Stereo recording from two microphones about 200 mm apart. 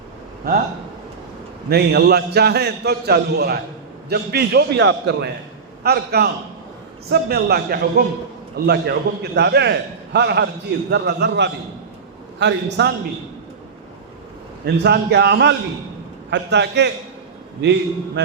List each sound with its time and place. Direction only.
0.4 s a man's voice: 50° right (ahead or behind)
1.7 s a man's voice: 55° right (ahead or behind)
14.6 s a man's voice: 55° right (ahead or behind)